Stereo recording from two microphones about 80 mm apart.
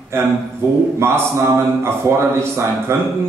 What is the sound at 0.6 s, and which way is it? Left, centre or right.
A man's voice, right.